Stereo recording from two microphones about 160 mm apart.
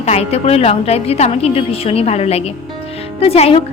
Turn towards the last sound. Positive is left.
turn(degrees=40)  # may be behind; listen again after turning